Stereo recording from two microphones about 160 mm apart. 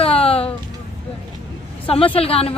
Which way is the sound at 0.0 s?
35° left (ahead or behind).